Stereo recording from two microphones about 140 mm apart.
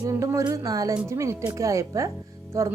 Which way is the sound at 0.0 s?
20° right (ahead or behind).